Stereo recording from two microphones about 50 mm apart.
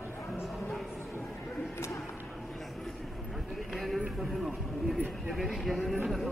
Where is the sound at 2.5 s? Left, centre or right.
Centre.